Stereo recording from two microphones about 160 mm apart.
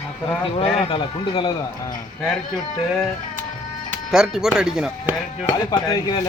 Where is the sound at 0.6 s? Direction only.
30° left (ahead or behind).